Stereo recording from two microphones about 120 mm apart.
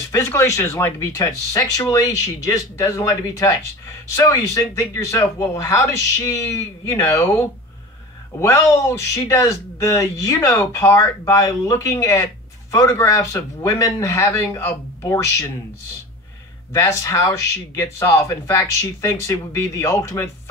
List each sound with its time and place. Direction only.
0.1 s speech: 20° left (ahead or behind)
16.7 s speech: 25° left (ahead or behind)